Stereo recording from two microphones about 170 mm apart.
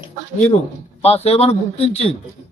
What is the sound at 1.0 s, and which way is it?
A man's voice, 40° left (ahead or behind).